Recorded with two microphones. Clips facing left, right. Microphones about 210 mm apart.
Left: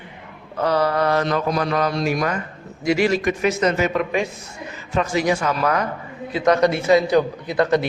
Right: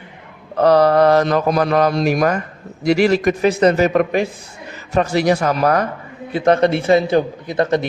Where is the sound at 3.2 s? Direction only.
35° right (ahead or behind).